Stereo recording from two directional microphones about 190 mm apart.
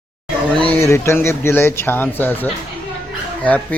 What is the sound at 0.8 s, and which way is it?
Speech, 15° left (ahead or behind).